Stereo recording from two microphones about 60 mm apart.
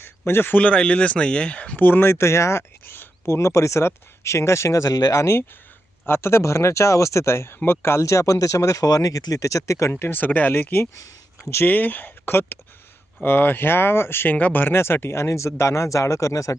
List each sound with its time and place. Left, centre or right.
0.0 s speech: left
2.8 s a sound: left
3.2 s speech: left
6.1 s speech: left
9.9 s speech: left